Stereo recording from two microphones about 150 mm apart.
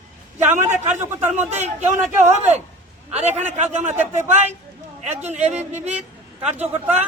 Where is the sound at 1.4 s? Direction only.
50° right (ahead or behind).